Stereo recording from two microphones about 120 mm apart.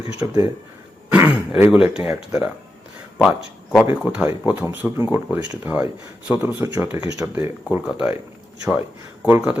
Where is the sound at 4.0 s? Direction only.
5° right (ahead or behind).